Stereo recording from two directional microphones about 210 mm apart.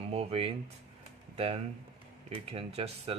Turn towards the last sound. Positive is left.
turn(degrees=-30)  # may be behind; listen again after turning